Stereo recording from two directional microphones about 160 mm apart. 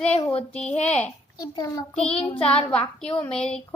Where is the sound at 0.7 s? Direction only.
45° left (ahead or behind).